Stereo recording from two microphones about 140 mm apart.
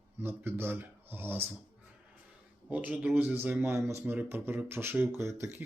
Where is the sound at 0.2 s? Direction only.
15° right (ahead or behind).